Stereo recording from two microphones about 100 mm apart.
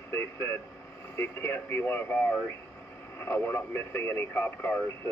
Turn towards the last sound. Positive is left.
turn(degrees=20)  # may be behind; listen again after turning